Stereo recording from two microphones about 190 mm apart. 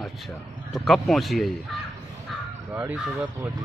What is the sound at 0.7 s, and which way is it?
Speech, centre (ahead or behind).